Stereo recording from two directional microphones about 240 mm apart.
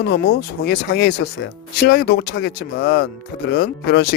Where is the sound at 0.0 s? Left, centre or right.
Left.